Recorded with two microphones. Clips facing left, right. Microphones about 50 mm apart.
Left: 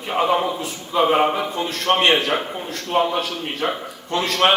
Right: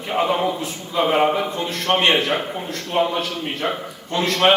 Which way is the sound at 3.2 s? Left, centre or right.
Left.